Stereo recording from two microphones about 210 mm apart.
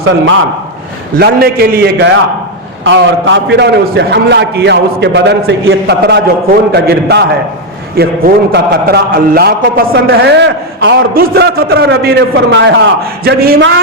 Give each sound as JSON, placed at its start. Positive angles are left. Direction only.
{"t": 1.2, "sound": "a man's voice", "side_deg": -50}
{"t": 2.8, "sound": "a man's voice", "side_deg": -60}